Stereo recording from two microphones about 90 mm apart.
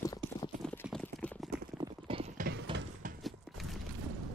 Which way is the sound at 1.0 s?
15° left (ahead or behind).